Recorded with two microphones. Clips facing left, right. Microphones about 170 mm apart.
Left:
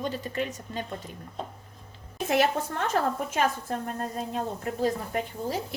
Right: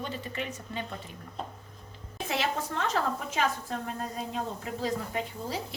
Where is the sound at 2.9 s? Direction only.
50° left (ahead or behind).